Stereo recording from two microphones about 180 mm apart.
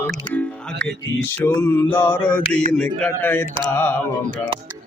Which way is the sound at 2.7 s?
5° left (ahead or behind).